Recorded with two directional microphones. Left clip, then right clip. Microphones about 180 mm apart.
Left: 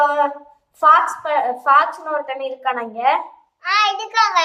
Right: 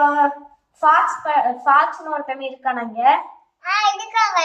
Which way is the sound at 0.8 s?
55° left (ahead or behind).